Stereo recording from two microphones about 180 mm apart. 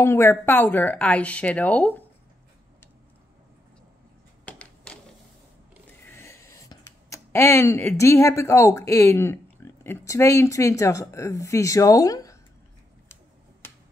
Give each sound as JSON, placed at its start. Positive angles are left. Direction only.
{"t": 0.0, "sound": "speech", "side_deg": 15}
{"t": 4.5, "sound": "a sound", "side_deg": 5}
{"t": 6.0, "sound": "speech", "side_deg": 15}